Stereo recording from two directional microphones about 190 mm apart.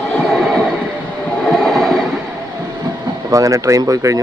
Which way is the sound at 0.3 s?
Centre (ahead or behind).